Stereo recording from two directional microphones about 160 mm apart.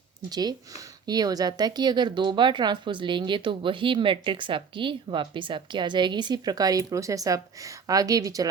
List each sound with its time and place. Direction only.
0.3 s speech: 25° right (ahead or behind)